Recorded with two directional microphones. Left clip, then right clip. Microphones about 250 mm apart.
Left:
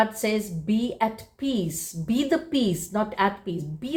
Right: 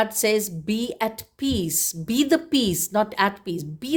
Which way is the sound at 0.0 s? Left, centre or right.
Right.